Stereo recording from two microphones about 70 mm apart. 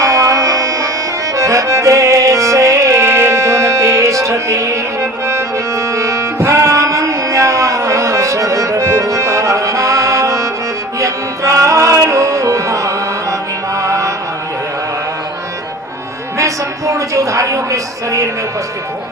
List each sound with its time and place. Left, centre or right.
0.0 s music: right
13.7 s mantra: right
16.4 s a sound: right